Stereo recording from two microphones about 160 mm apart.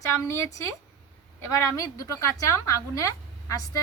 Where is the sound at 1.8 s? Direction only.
20° left (ahead or behind).